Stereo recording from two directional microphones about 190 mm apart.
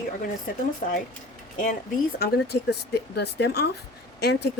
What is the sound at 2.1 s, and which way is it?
Speech, 55° left (ahead or behind).